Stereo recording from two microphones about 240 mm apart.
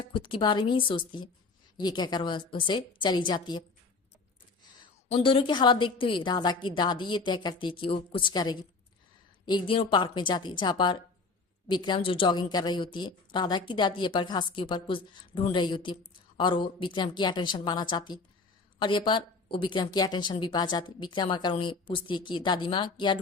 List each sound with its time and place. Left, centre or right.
0.1 s a woman's voice: left
5.0 s a woman's voice: left